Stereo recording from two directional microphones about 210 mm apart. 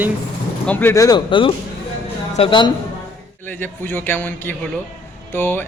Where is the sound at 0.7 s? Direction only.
10° left (ahead or behind).